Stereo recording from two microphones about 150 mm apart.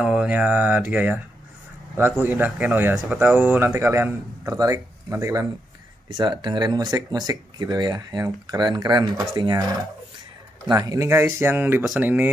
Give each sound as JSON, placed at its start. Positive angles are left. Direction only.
{"t": 0.0, "sound": "a man's voice", "side_deg": -5}
{"t": 2.9, "sound": "a man's voice", "side_deg": 0}